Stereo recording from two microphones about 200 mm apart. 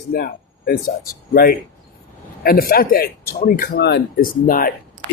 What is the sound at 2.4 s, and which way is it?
Speech, 50° left (ahead or behind).